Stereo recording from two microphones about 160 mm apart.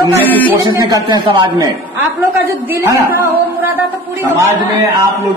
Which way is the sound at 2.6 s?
15° right (ahead or behind).